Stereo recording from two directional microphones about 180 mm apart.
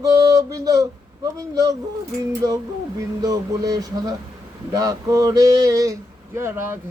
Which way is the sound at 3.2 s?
20° right (ahead or behind).